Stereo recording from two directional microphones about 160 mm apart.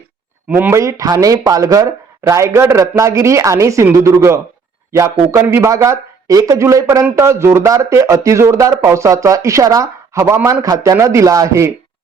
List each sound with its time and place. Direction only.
0.4 s speech: 10° right (ahead or behind)